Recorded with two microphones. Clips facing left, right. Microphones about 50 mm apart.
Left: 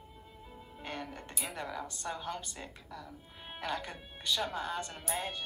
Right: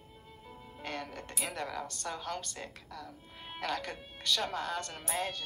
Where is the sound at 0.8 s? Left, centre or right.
Centre.